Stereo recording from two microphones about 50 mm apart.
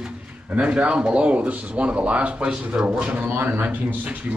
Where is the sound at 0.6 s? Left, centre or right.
Right.